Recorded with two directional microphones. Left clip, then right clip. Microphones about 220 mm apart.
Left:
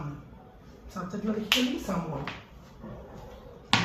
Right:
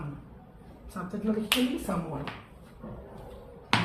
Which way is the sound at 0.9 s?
10° left (ahead or behind).